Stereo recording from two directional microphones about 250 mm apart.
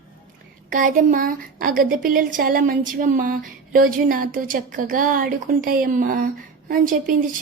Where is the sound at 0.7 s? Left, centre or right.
Right.